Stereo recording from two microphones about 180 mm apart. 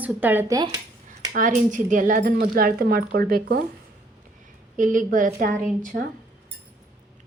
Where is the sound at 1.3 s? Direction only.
45° right (ahead or behind).